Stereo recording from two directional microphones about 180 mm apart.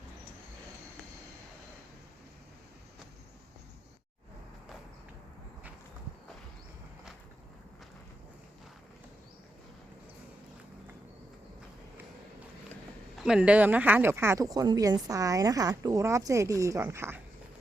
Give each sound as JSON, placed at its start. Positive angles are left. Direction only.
{"t": 13.1, "sound": "speech", "side_deg": -5}